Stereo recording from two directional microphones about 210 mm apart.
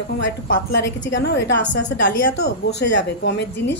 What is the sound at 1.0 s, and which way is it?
A woman's voice, 55° left (ahead or behind).